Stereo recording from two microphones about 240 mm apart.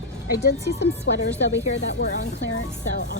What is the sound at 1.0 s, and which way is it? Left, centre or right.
Speech, left.